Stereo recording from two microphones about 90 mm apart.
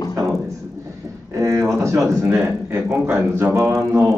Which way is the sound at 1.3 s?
35° right (ahead or behind).